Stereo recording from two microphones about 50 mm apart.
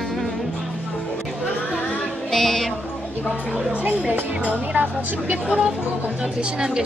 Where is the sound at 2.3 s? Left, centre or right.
Centre.